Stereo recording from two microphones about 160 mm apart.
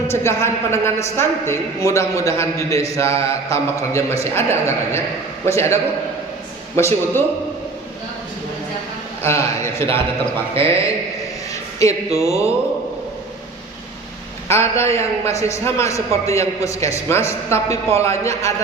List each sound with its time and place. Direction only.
0.1 s a man's voice: 15° left (ahead or behind)
9.2 s a man's voice: 15° left (ahead or behind)
10.5 s a man's voice: 15° left (ahead or behind)
14.4 s a man's voice: 15° left (ahead or behind)